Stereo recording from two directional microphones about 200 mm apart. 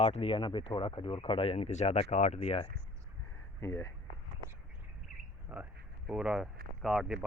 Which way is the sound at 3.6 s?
15° left (ahead or behind).